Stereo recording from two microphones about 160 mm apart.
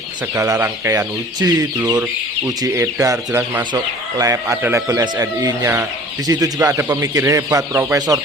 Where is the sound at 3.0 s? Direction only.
20° right (ahead or behind).